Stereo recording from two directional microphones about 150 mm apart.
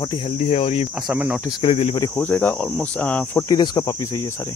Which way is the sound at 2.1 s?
10° left (ahead or behind).